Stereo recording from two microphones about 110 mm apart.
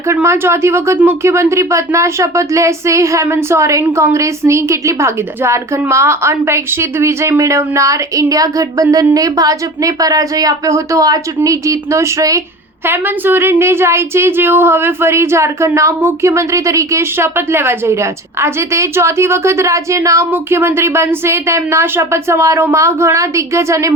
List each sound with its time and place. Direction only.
0.1 s speech: 25° right (ahead or behind)
12.8 s speech: 20° right (ahead or behind)